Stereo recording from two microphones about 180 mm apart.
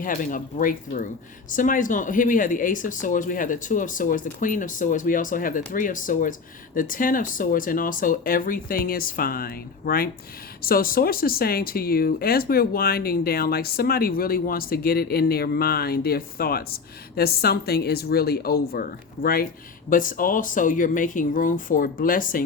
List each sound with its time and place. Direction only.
0.0 s speech: 45° left (ahead or behind)